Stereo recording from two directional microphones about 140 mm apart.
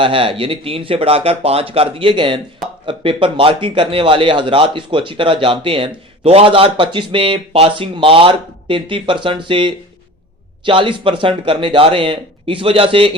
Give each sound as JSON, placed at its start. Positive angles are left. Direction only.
{"t": 0.0, "sound": "speech", "side_deg": -40}